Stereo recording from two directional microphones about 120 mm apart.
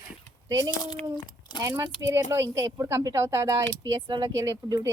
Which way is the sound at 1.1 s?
40° left (ahead or behind).